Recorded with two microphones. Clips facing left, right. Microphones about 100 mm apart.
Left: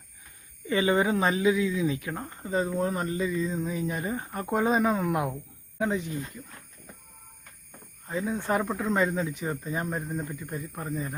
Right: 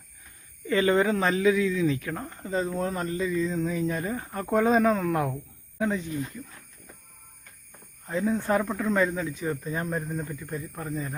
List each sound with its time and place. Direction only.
0.7 s speech: 15° left (ahead or behind)
8.1 s speech: 10° left (ahead or behind)
8.4 s speech: 20° left (ahead or behind)